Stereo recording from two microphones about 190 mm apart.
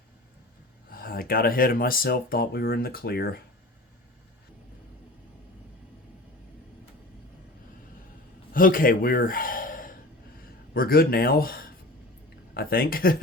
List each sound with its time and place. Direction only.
0.9 s speech: 50° left (ahead or behind)
8.5 s a man's voice: 45° left (ahead or behind)